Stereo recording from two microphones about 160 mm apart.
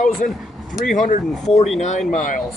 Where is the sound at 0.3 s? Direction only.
Centre (ahead or behind).